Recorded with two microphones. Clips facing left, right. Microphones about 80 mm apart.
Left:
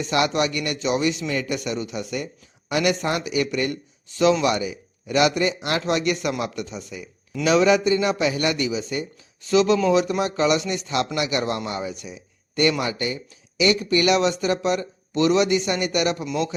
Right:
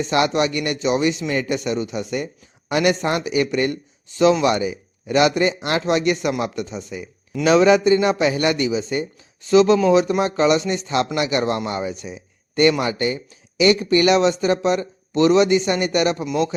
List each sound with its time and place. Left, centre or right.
0.0 s speech: right
7.4 s speech: right